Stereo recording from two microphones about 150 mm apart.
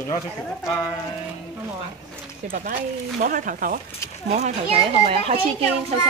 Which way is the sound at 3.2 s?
65° right (ahead or behind).